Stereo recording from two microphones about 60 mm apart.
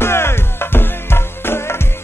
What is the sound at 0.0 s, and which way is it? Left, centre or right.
Music, left.